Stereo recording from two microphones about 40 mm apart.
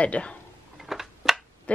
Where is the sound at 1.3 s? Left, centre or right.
Centre.